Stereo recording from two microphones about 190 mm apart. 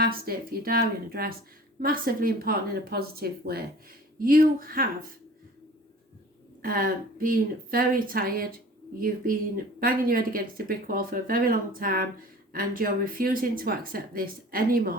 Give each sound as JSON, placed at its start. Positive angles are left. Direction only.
{"t": 0.0, "sound": "speech", "side_deg": -50}
{"t": 6.6, "sound": "speech", "side_deg": -50}